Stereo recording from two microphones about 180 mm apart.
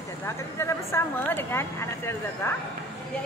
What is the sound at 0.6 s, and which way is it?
Speech, 15° left (ahead or behind).